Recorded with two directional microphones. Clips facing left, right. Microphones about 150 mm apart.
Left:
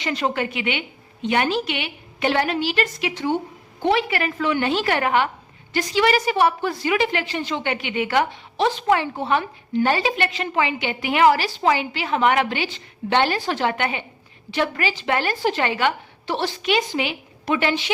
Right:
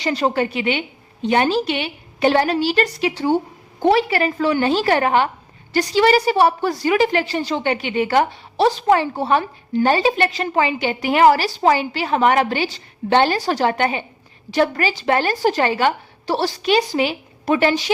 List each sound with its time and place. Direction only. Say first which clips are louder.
0.0 s a woman's voice: right 4 dB; 35° right (ahead or behind)